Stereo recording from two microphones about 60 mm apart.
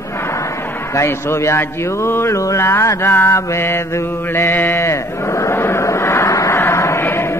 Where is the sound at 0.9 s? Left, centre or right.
Left.